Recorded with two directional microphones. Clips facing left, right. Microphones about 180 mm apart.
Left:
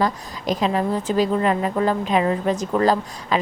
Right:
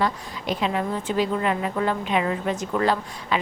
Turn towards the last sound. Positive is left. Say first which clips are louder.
# left 4 dB
turn(degrees=40)  # may be behind; listen again after turning